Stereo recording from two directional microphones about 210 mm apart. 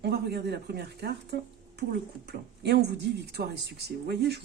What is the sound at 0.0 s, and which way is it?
Speech, 50° right (ahead or behind).